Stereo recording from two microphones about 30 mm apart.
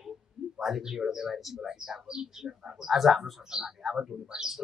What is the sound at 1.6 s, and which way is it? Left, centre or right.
Speech, centre.